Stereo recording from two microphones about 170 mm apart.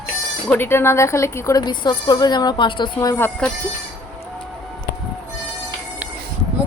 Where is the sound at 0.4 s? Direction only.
10° left (ahead or behind).